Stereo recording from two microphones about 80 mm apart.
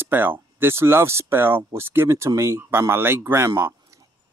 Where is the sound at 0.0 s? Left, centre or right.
Right.